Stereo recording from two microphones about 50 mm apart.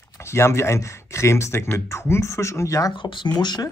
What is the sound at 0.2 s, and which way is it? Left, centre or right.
Speech, left.